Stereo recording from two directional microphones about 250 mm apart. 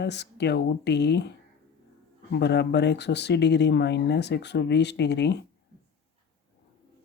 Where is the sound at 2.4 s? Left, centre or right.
Left.